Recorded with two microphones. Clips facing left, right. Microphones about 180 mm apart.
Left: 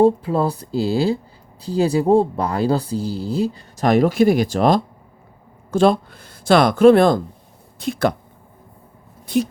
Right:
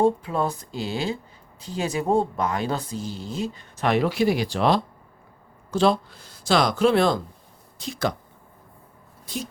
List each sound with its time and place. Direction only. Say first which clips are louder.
0.0 s speech: left 6 dB; 30° left (ahead or behind); by 8.1 s 55° left (ahead or behind)
9.2 s speech: left 13 dB; 65° left (ahead or behind)